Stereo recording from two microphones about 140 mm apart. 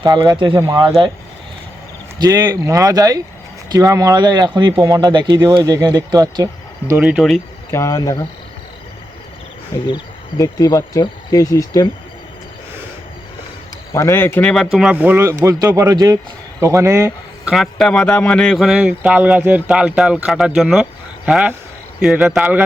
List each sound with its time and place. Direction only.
0.0 s speech: 30° right (ahead or behind)
2.1 s speech: 30° right (ahead or behind)
7.0 s a man's voice: 5° right (ahead or behind)
7.7 s speech: 20° left (ahead or behind)
9.8 s speech: 30° left (ahead or behind)
13.9 s speech: 20° left (ahead or behind)
14.5 s speech: centre (ahead or behind); by 17.5 s 20° right (ahead or behind)
17.5 s a man's voice: centre (ahead or behind)